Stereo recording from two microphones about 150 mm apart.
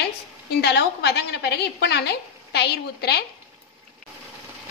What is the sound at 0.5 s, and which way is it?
A woman's voice, 90° left.